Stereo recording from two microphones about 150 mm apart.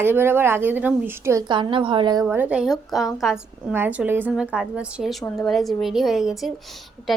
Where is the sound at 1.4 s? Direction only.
30° right (ahead or behind).